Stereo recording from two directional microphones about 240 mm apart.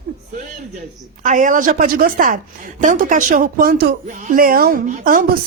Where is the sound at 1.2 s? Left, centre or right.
Right.